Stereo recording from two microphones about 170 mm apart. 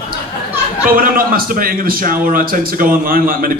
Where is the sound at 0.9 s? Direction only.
60° right (ahead or behind).